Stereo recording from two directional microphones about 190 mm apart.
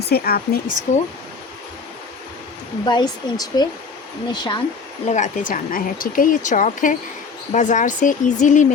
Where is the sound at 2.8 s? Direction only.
25° left (ahead or behind).